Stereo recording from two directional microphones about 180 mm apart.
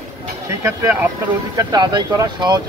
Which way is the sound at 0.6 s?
15° right (ahead or behind).